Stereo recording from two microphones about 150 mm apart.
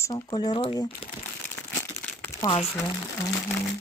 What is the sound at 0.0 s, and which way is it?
Speech, 30° left (ahead or behind).